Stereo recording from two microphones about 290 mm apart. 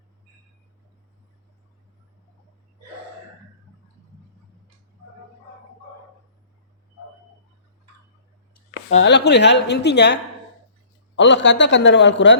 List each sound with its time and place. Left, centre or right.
8.9 s a woman's voice: left
11.2 s a woman's voice: left